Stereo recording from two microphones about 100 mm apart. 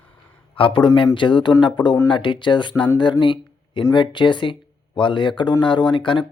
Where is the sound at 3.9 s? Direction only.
50° left (ahead or behind).